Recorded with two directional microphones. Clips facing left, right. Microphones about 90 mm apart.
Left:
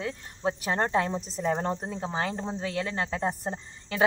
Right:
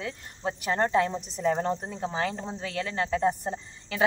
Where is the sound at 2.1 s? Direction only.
20° left (ahead or behind).